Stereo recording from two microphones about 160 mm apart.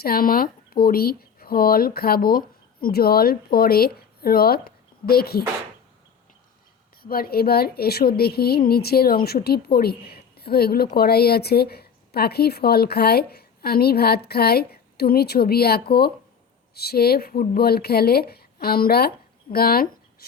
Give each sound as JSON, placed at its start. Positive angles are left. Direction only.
{"t": 0.0, "sound": "a woman's voice", "side_deg": 65}
{"t": 7.0, "sound": "a woman's voice", "side_deg": 70}